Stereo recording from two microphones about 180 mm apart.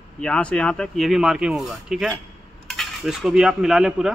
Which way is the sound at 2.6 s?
Centre (ahead or behind).